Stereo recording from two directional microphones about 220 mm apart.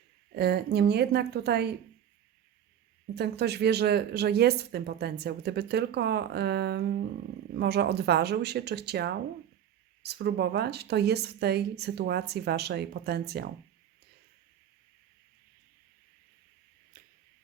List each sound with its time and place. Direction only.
0.3 s speech: 45° right (ahead or behind)
3.2 s speech: 50° right (ahead or behind)
16.9 s arrow: 40° right (ahead or behind)